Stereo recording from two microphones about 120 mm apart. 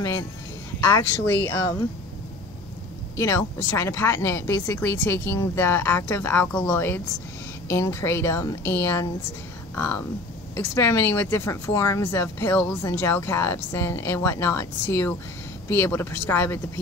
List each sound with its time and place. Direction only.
0.7 s speech: 20° left (ahead or behind)
1.4 s speech: 30° left (ahead or behind)
3.2 s speech: 25° left (ahead or behind)